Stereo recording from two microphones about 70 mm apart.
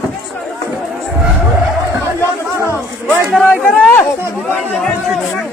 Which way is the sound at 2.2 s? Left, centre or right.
Left.